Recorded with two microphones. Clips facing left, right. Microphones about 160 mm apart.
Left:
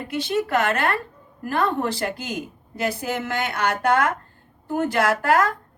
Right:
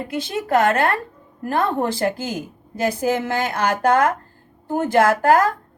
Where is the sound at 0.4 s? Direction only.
40° right (ahead or behind).